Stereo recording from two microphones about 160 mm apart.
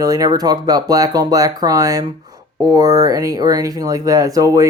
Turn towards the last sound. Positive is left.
turn(degrees=-20)  # may be behind; listen again after turning